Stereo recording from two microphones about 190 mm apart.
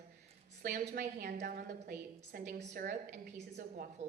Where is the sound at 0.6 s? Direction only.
45° right (ahead or behind).